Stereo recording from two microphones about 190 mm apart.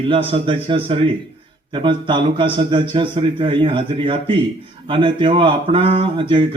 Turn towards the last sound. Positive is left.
turn(degrees=-25)  # may be behind; listen again after turning